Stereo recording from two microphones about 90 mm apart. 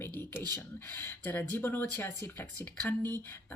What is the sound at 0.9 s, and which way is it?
Speech, 25° left (ahead or behind).